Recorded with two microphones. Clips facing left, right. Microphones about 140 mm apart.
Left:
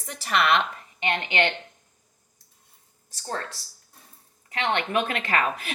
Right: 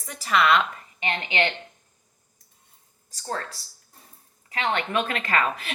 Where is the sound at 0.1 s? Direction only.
60° left (ahead or behind).